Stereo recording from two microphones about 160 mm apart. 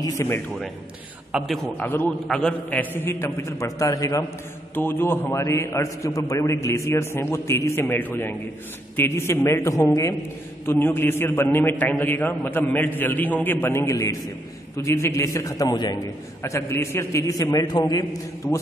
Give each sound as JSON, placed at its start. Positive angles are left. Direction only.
{"t": 0.0, "sound": "a man's voice", "side_deg": 15}
{"t": 1.3, "sound": "a man's voice", "side_deg": -5}
{"t": 1.8, "sound": "a man's voice", "side_deg": 10}